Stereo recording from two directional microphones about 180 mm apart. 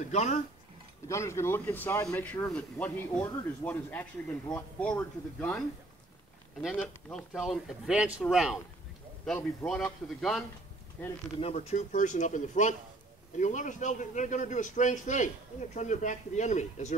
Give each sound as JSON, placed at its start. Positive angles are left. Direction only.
{"t": 0.1, "sound": "speech", "side_deg": 40}
{"t": 1.0, "sound": "speech", "side_deg": 15}
{"t": 6.7, "sound": "speech", "side_deg": 5}
{"t": 9.2, "sound": "speech", "side_deg": 5}
{"t": 11.4, "sound": "a man's voice", "side_deg": 40}